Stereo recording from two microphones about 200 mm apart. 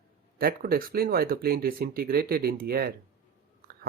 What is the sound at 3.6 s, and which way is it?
Chewing, 45° right (ahead or behind).